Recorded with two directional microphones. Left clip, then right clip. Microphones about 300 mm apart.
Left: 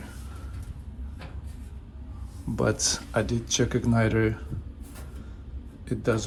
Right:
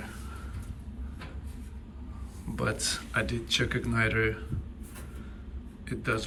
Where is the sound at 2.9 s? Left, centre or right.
Centre.